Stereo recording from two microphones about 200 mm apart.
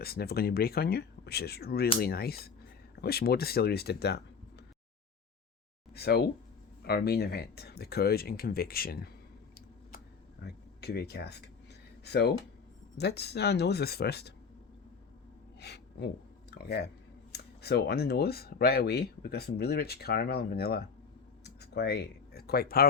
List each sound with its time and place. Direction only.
0.0 s speech: 50° left (ahead or behind)
5.9 s speech: 55° left (ahead or behind)
10.4 s speech: 55° left (ahead or behind)
15.6 s gasp: 55° left (ahead or behind)
16.6 s speech: 55° left (ahead or behind)
21.4 s a sound: 55° left (ahead or behind)